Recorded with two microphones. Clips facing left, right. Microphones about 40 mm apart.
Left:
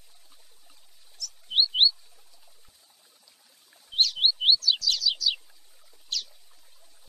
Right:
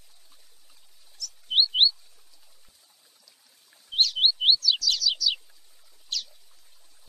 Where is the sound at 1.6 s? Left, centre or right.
Centre.